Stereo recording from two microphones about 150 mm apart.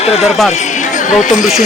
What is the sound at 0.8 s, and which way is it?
Chatter, 55° left (ahead or behind).